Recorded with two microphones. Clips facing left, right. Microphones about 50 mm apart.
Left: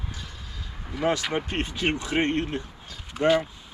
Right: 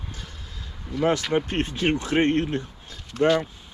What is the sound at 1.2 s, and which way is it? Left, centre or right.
Speech, centre.